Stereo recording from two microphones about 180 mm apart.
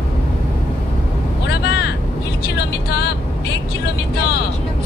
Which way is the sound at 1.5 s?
70° left (ahead or behind).